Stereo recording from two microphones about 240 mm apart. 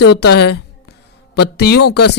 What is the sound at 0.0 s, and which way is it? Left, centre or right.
A woman's voice, left.